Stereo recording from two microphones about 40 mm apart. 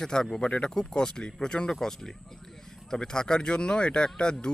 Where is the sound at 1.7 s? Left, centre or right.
Centre.